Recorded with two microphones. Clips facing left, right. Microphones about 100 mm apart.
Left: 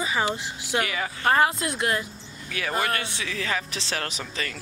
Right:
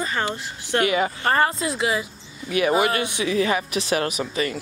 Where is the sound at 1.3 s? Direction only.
Centre (ahead or behind).